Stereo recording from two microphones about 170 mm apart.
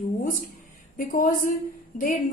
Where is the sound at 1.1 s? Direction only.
50° left (ahead or behind).